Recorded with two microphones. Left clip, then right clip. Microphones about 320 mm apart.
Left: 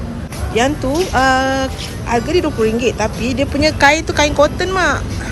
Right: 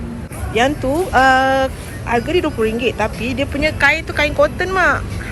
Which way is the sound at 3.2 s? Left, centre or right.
Left.